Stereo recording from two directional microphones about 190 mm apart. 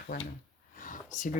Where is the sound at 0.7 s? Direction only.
45° left (ahead or behind).